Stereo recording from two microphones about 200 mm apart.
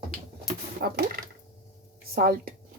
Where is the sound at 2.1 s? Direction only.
50° right (ahead or behind).